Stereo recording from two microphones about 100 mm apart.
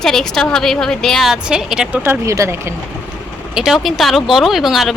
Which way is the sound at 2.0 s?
30° right (ahead or behind).